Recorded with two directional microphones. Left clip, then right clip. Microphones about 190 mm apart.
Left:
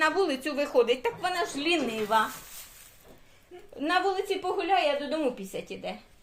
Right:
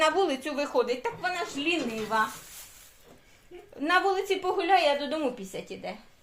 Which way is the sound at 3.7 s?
Centre (ahead or behind).